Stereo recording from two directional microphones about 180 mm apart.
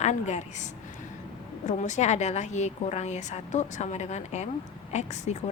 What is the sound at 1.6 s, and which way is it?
A woman's voice, 40° left (ahead or behind).